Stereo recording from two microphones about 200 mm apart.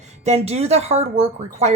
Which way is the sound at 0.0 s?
30° right (ahead or behind).